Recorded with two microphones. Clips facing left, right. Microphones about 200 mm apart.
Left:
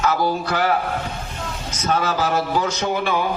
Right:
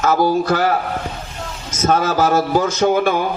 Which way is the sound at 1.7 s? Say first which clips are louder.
Right 5 dB; 45° right (ahead or behind).